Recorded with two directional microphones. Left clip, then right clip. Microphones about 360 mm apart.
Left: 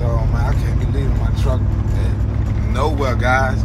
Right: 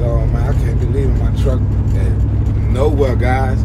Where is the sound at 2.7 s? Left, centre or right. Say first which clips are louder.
Right 4 dB; left.